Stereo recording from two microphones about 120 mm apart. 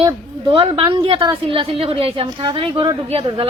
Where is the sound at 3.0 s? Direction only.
55° right (ahead or behind).